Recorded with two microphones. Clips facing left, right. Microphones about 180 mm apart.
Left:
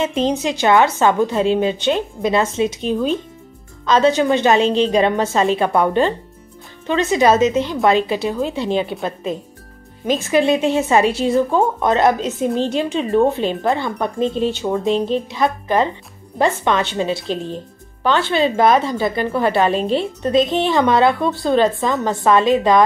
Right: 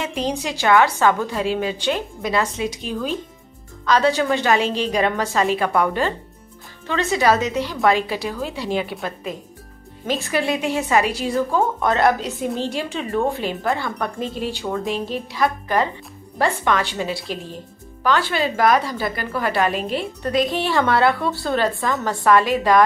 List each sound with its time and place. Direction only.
0.0 s a woman's voice: 20° left (ahead or behind)
10.0 s a woman's voice: 20° left (ahead or behind)